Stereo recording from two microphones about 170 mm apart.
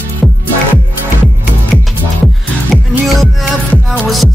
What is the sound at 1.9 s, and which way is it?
Music, centre (ahead or behind).